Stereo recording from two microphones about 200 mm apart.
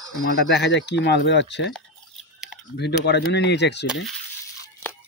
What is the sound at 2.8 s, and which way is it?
Speech, 55° left (ahead or behind).